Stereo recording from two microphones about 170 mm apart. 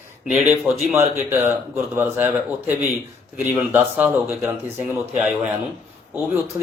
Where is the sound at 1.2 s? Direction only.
15° right (ahead or behind).